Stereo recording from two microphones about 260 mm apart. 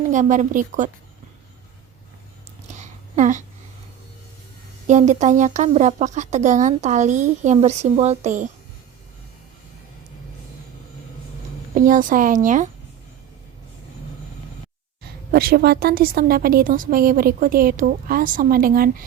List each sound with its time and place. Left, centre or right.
0.1 s speech: right
2.6 s a sound: right
4.9 s speech: right
11.7 s a woman's voice: right
15.3 s a woman's voice: right